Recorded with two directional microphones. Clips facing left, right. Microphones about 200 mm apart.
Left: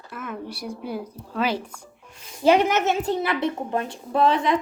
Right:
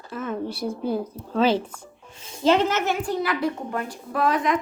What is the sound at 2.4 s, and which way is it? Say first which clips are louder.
A woman's voice: left 2 dB; 15° left (ahead or behind).